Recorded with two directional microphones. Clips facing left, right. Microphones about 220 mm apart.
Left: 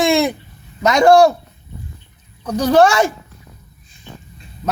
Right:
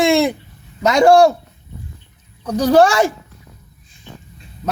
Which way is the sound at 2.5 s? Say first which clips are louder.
Even; 35° right (ahead or behind).